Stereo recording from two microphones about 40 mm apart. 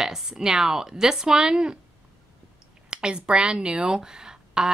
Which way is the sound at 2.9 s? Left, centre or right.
Right.